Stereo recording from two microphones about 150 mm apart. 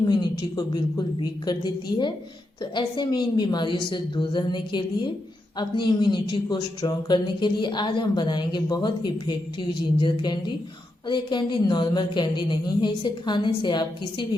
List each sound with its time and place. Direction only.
0.0 s a woman's voice: 30° left (ahead or behind)